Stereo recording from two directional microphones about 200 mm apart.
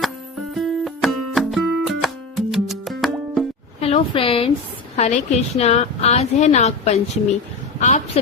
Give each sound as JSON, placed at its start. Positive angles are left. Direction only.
{"t": 0.5, "sound": "music", "side_deg": 0}
{"t": 3.8, "sound": "a woman's voice", "side_deg": 30}